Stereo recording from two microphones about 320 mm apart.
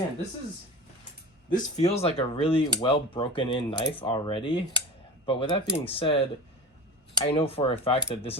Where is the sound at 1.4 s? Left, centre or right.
Left.